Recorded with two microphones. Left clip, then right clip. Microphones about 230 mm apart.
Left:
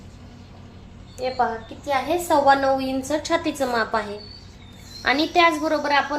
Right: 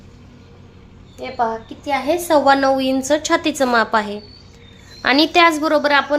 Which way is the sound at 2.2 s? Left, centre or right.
Right.